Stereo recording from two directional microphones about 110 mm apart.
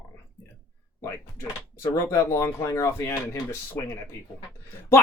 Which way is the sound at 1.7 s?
20° left (ahead or behind).